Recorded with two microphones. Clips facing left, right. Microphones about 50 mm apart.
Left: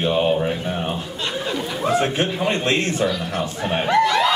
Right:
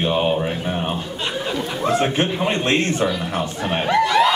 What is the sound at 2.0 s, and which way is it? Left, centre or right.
Speech, centre.